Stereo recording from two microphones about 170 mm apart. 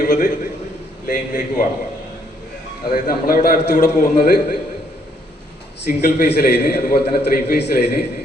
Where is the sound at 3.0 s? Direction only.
60° left (ahead or behind).